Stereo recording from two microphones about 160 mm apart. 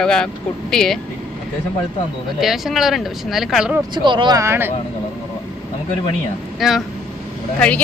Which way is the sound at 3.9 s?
30° right (ahead or behind).